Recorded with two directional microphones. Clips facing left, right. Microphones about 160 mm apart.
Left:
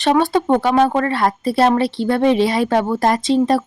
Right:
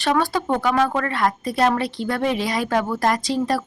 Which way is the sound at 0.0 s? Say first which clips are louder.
Left 5 dB; 25° left (ahead or behind).